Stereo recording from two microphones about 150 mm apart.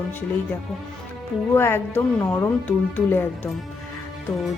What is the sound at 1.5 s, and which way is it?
Speech, 15° left (ahead or behind).